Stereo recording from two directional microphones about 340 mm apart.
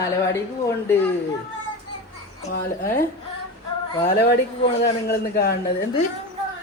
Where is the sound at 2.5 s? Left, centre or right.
Left.